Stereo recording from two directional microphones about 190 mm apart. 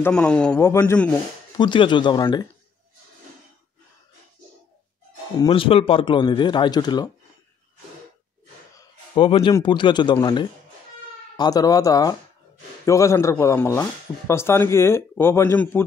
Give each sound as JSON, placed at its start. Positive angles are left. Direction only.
{"t": 0.0, "sound": "speech", "side_deg": 5}
{"t": 1.6, "sound": "speech", "side_deg": 25}
{"t": 5.4, "sound": "speech", "side_deg": 30}
{"t": 8.7, "sound": "a man's voice", "side_deg": 25}